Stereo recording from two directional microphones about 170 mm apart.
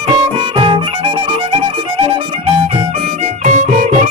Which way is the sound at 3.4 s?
45° right (ahead or behind).